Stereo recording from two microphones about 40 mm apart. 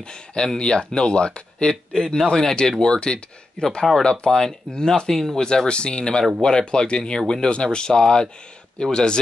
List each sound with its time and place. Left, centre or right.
0.0 s speech: left